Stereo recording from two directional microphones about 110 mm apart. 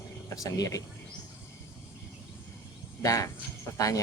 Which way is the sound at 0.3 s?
30° left (ahead or behind).